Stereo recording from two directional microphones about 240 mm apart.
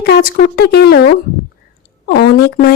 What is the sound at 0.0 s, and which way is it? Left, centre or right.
Speech, left.